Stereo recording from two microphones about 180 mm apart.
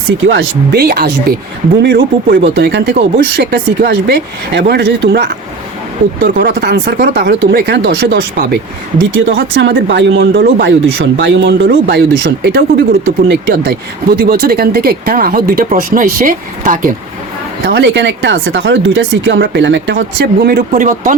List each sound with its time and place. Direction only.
0.3 s speech: 65° right (ahead or behind); by 2.9 s 85° right
2.9 s speech: 60° right (ahead or behind)
6.4 s speech: 65° right (ahead or behind)
9.0 s speech: 90° right
11.7 s speech: 70° right (ahead or behind)
13.2 s speech: 65° right (ahead or behind); by 16.9 s 45° right (ahead or behind)
17.7 s speech: 70° right (ahead or behind); by 21.2 s 50° right (ahead or behind)